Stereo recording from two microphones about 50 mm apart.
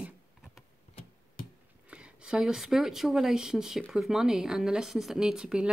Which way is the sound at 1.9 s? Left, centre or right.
Right.